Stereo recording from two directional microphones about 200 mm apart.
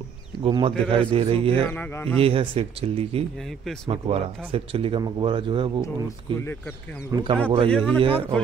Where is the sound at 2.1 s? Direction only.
30° right (ahead or behind).